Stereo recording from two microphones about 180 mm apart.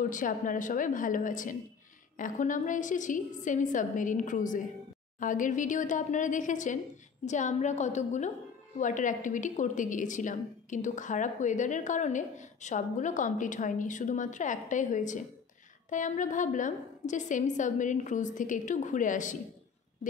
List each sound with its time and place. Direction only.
0.0 s a woman's voice: 45° left (ahead or behind)